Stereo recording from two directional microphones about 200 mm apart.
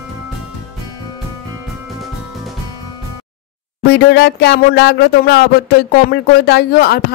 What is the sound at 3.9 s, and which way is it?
Speech, 55° left (ahead or behind).